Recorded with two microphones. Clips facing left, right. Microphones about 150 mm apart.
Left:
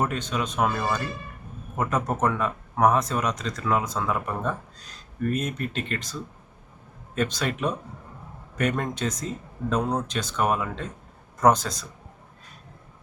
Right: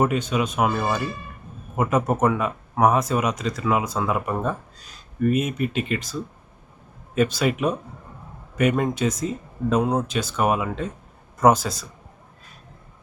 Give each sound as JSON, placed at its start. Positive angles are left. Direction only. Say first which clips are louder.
{"t": 0.0, "sound": "speech", "louder": "right 5 dB", "side_deg": -10}
{"t": 7.2, "sound": "speech", "louder": "right 5 dB", "side_deg": -10}